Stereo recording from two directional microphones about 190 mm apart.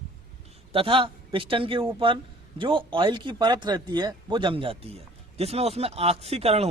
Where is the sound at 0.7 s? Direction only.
30° right (ahead or behind).